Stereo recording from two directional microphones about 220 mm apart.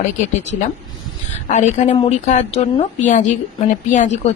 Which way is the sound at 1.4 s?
35° left (ahead or behind).